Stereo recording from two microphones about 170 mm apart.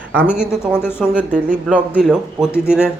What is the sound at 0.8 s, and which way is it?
Speech, 15° left (ahead or behind).